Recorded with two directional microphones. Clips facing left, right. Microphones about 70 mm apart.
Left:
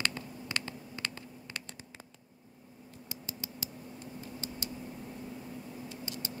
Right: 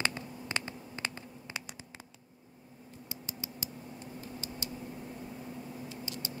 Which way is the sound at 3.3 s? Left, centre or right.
Right.